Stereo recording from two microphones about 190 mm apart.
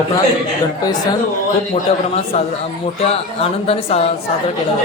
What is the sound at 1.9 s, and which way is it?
Speech, 30° left (ahead or behind).